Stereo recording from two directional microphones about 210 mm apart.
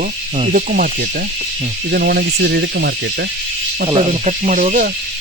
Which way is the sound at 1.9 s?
50° right (ahead or behind).